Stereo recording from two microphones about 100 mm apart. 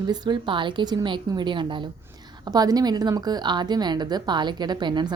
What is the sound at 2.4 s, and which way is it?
A woman's voice, 40° right (ahead or behind).